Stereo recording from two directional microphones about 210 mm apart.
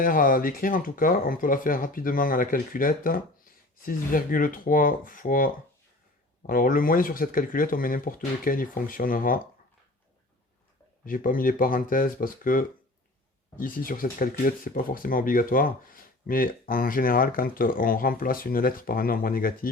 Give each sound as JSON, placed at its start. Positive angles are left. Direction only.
{"t": 0.0, "sound": "speech", "side_deg": 40}
{"t": 6.5, "sound": "speech", "side_deg": 40}
{"t": 11.0, "sound": "speech", "side_deg": 40}